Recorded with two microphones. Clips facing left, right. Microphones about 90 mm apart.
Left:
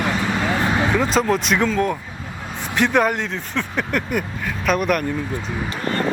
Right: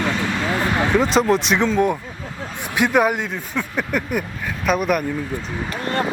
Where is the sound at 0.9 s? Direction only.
Centre (ahead or behind).